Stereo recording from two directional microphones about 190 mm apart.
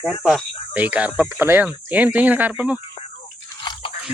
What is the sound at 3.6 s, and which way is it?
Crunch, 25° left (ahead or behind).